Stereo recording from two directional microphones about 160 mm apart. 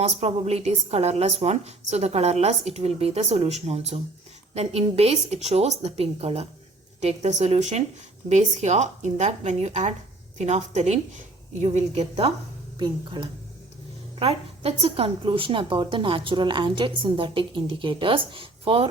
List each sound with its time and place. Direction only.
0.0 s a woman's voice: 40° right (ahead or behind)